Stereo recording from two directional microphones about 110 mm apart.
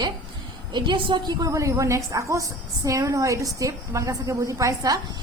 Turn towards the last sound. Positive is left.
turn(degrees=-35)  # may be behind; listen again after turning